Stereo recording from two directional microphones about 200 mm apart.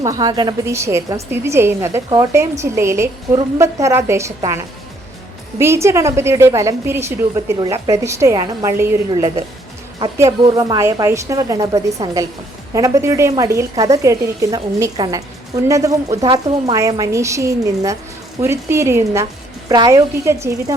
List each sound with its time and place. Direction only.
0.0 s a woman's voice: 20° right (ahead or behind)